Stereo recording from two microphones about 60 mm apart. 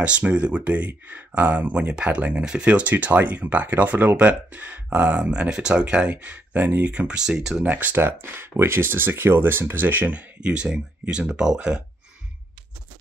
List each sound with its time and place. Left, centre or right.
0.0 s speech: centre
6.1 s speech: right
6.9 s speech: centre
7.3 s speech: centre
7.7 s speech: right
10.4 s speech: centre